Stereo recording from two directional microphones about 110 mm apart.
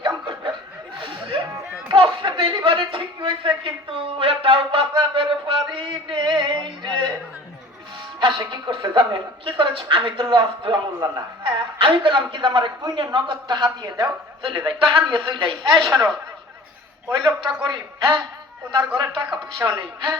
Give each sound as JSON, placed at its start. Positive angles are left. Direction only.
{"t": 0.0, "sound": "chuckle", "side_deg": -45}
{"t": 1.9, "sound": "a man's voice", "side_deg": -50}
{"t": 8.2, "sound": "speech", "side_deg": -45}
{"t": 17.1, "sound": "speech", "side_deg": -45}
{"t": 19.6, "sound": "speech", "side_deg": -25}